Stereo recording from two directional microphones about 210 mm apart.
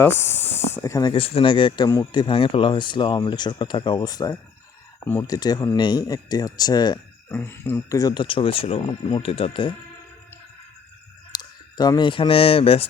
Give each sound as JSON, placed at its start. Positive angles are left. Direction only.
{"t": 0.0, "sound": "speech", "side_deg": 10}
{"t": 11.3, "sound": "speech", "side_deg": 20}